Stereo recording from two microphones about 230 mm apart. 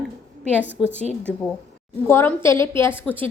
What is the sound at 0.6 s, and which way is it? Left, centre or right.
Speech, centre.